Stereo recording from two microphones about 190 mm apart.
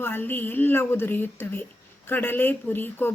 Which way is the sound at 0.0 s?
10° left (ahead or behind).